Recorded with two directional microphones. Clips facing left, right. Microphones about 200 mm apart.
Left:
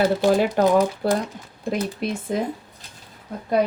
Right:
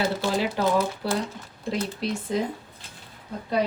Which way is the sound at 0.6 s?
50° left (ahead or behind).